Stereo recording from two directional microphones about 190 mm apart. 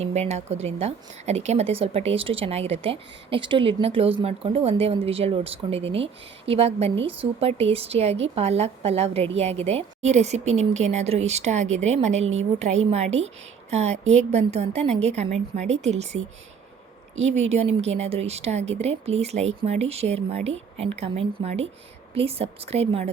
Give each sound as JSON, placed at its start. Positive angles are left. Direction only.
{"t": 0.0, "sound": "a woman's voice", "side_deg": -35}